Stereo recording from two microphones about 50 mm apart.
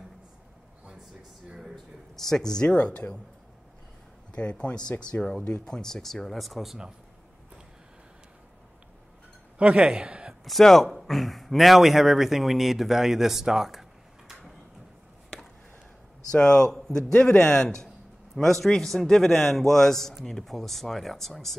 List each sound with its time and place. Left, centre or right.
2.1 s speech: centre
4.3 s speech: left; by 6.8 s centre
9.6 s a man's voice: right
10.4 s speech: centre
16.3 s a man's voice: centre